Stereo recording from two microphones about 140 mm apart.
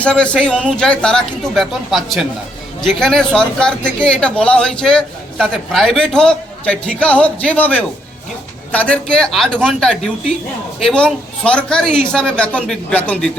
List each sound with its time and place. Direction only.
0.0 s a man's voice: 10° left (ahead or behind)